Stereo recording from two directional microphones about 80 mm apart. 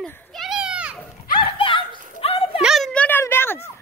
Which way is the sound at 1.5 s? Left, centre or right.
Left.